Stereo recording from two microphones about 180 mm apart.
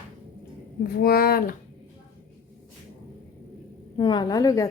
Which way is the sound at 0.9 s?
55° left (ahead or behind).